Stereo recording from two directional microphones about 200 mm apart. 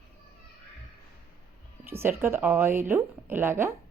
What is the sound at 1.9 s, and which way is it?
Speech, 10° right (ahead or behind).